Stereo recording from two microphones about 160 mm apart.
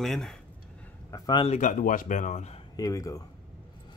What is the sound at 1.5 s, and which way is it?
Speech, 55° left (ahead or behind).